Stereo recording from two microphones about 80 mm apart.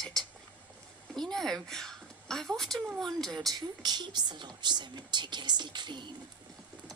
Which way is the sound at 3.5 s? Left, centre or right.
Right.